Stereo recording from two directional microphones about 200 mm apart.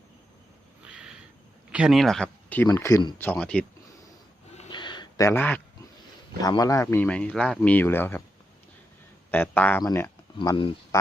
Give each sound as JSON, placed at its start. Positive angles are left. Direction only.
{"t": 0.9, "sound": "a sound", "side_deg": -5}
{"t": 1.7, "sound": "speech", "side_deg": -5}
{"t": 3.2, "sound": "speech", "side_deg": 10}
{"t": 4.7, "sound": "a sound", "side_deg": 20}
{"t": 6.4, "sound": "speech", "side_deg": 20}
{"t": 9.3, "sound": "speech", "side_deg": 10}